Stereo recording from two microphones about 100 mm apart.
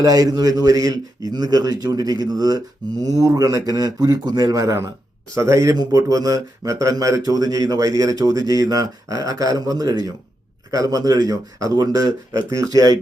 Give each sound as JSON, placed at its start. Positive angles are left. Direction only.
{"t": 0.0, "sound": "speech", "side_deg": -40}